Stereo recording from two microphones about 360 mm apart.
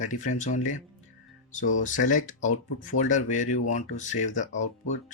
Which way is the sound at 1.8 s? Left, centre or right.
Left.